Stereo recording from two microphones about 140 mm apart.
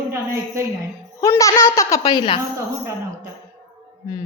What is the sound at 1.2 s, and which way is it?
Speech, 20° left (ahead or behind).